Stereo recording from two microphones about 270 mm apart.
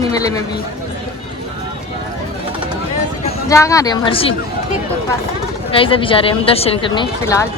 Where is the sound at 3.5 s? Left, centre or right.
Centre.